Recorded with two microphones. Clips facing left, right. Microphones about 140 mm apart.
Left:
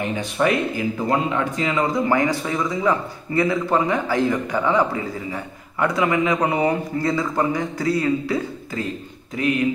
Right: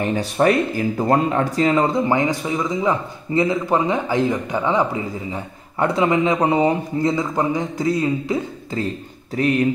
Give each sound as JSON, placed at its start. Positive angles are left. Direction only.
{"t": 0.0, "sound": "speech", "side_deg": -40}
{"t": 2.0, "sound": "a man's voice", "side_deg": -20}
{"t": 9.4, "sound": "speech", "side_deg": -40}